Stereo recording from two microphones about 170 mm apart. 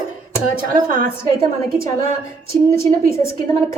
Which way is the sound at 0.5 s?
55° right (ahead or behind).